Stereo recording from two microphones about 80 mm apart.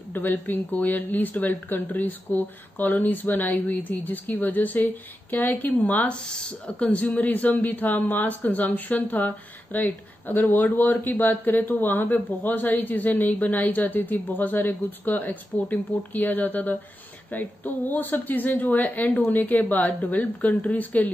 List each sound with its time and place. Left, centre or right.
0.1 s speech: left
6.2 s speech: centre